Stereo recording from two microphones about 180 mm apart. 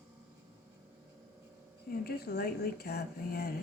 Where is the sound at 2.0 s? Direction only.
60° left (ahead or behind).